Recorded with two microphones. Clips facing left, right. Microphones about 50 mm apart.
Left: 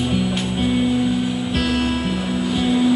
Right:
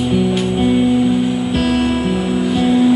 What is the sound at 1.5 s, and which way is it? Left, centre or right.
Music, right.